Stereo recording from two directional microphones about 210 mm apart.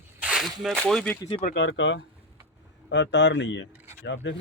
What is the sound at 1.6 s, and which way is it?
Speech, 60° left (ahead or behind).